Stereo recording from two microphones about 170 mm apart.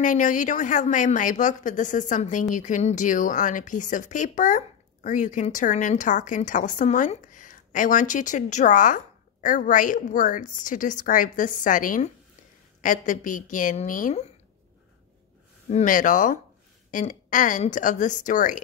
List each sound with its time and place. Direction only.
0.0 s a woman's voice: 50° left (ahead or behind)
15.7 s a woman's voice: 50° left (ahead or behind)